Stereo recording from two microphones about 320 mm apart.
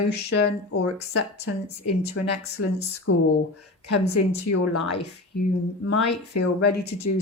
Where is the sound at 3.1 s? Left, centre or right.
Left.